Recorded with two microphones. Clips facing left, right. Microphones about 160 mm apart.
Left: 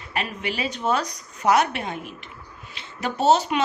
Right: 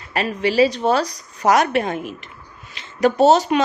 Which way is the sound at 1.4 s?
90° right.